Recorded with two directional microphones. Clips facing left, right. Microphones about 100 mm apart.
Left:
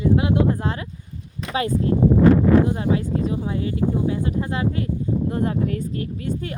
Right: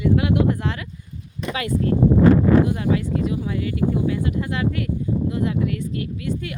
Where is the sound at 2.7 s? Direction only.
30° left (ahead or behind).